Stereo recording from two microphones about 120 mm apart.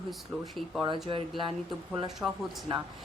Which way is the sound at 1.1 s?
45° right (ahead or behind).